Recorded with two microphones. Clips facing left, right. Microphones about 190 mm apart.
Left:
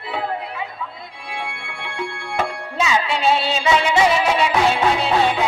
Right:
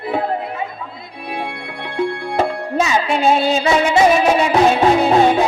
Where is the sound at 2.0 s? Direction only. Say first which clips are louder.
Right 7 dB; 40° right (ahead or behind).